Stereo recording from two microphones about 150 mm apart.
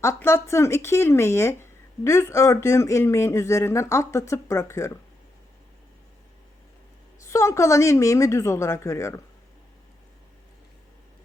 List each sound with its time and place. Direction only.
0.0 s speech: 20° left (ahead or behind)
7.3 s speech: 20° left (ahead or behind)